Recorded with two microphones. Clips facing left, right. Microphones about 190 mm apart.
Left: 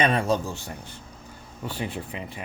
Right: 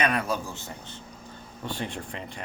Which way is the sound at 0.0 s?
25° left (ahead or behind).